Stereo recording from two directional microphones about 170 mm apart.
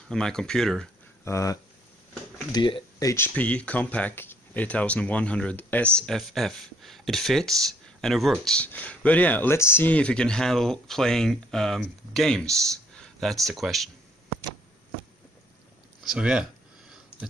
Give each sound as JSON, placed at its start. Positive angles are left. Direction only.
{"t": 0.1, "sound": "speech", "side_deg": 5}
{"t": 1.2, "sound": "speech", "side_deg": 20}
{"t": 16.0, "sound": "speech", "side_deg": -5}